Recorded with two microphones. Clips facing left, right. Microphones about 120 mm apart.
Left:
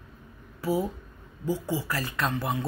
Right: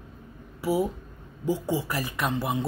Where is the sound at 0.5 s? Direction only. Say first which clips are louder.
Right 2 dB; 15° right (ahead or behind).